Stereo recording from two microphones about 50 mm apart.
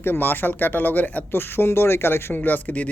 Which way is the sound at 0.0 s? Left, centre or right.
Left.